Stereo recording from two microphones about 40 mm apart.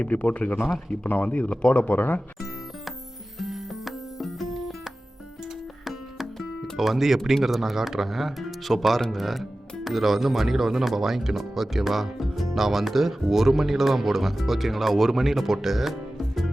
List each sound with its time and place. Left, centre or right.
0.0 s speech: left
3.3 s music: centre
5.8 s music: centre
6.7 s speech: centre